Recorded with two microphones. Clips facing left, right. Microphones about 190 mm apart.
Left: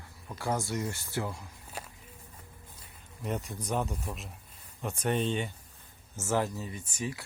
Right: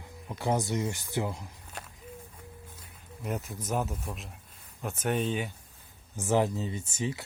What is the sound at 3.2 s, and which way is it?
Speech, 5° right (ahead or behind).